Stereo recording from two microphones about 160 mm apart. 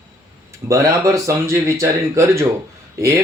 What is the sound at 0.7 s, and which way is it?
Speech, 20° right (ahead or behind).